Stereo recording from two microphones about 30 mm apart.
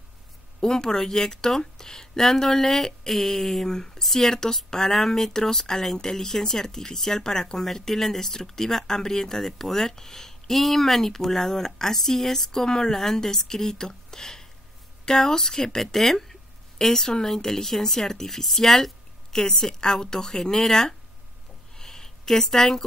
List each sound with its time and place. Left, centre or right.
0.6 s speech: centre
4.0 s speech: centre
15.8 s speech: centre
19.3 s speech: left
21.7 s a sound: centre